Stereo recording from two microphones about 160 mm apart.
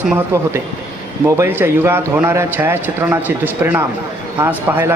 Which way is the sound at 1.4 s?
15° right (ahead or behind).